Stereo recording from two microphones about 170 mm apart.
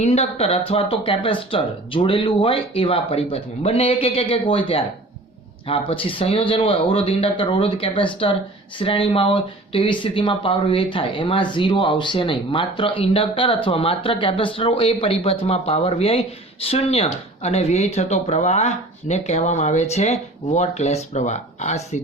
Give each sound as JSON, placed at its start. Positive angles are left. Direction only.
{"t": 0.0, "sound": "speech", "side_deg": 40}